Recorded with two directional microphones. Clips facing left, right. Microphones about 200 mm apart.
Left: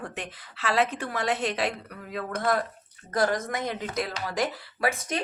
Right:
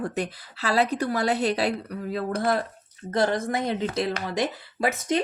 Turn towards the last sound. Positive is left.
turn(degrees=-25)  # may be behind; listen again after turning